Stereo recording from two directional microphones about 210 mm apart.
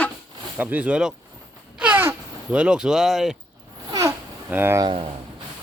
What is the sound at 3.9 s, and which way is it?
Babbling, 15° right (ahead or behind).